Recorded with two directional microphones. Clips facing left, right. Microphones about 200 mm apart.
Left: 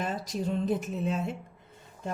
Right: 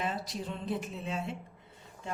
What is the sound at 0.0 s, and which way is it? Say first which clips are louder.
Speech: left 4 dB; 45° left (ahead or behind).